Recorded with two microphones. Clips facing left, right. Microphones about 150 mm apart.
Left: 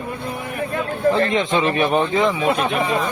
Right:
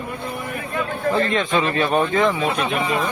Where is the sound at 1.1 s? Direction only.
20° left (ahead or behind).